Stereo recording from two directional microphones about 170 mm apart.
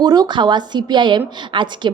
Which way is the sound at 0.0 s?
25° right (ahead or behind).